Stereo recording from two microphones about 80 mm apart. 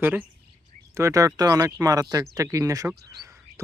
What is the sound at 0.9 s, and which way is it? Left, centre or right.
Speech, right.